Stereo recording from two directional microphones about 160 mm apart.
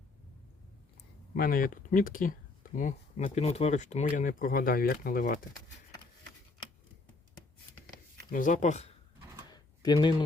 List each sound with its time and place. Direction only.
1.4 s speech: 60° left (ahead or behind)
8.3 s speech: 55° left (ahead or behind)
9.5 s typing: 25° left (ahead or behind)